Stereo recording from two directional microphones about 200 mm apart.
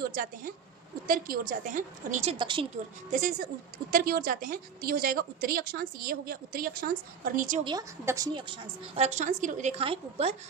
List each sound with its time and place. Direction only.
0.1 s a woman's voice: 45° right (ahead or behind)
2.4 s a woman's voice: 25° right (ahead or behind)
3.1 s a woman's voice: 45° right (ahead or behind)
7.6 s a woman's voice: 20° right (ahead or behind)
9.0 s a woman's voice: 35° right (ahead or behind)